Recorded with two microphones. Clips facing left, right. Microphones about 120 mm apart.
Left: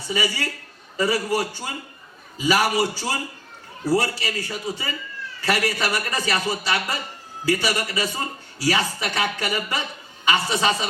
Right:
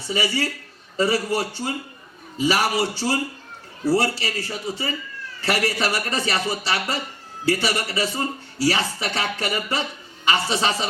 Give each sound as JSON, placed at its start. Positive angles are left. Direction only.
{"t": 0.1, "sound": "a man's voice", "side_deg": -30}